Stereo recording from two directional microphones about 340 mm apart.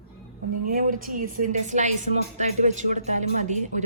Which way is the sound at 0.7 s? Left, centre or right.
Right.